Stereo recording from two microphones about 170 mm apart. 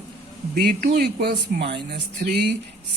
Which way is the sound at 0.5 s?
55° right (ahead or behind).